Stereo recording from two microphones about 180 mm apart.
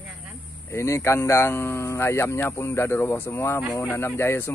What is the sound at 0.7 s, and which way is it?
Speech, 15° left (ahead or behind).